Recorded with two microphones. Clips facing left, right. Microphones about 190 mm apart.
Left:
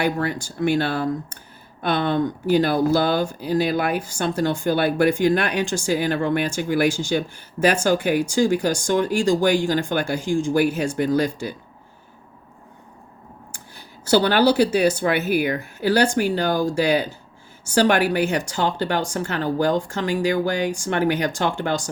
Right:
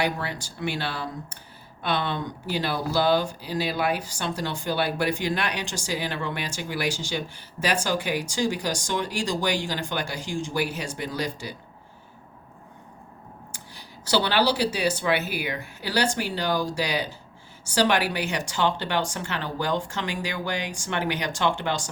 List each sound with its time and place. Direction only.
0.0 s speech: 45° left (ahead or behind)
13.5 s speech: 50° left (ahead or behind)